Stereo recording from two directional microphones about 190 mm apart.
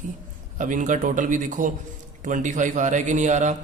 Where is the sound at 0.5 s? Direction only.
40° right (ahead or behind).